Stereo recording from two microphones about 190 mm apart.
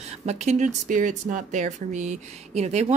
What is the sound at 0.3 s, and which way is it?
A woman's voice, 40° right (ahead or behind).